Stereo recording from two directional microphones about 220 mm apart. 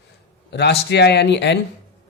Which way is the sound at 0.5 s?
50° left (ahead or behind).